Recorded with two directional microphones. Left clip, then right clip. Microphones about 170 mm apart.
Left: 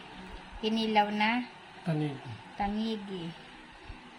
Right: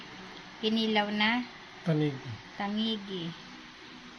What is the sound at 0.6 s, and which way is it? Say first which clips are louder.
Speech: left 1 dB; 20° left (ahead or behind).